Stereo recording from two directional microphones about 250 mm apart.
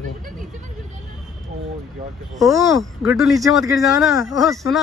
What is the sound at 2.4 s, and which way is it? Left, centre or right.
Speech, centre.